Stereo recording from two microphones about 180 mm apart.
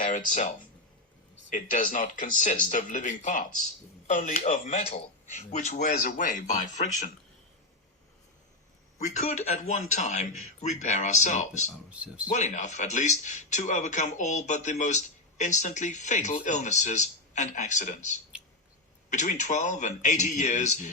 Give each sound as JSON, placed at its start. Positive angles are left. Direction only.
{"t": 0.0, "sound": "a man's voice", "side_deg": 45}
{"t": 9.0, "sound": "a man's voice", "side_deg": 40}
{"t": 11.9, "sound": "speech", "side_deg": -5}
{"t": 12.3, "sound": "a man's voice", "side_deg": 40}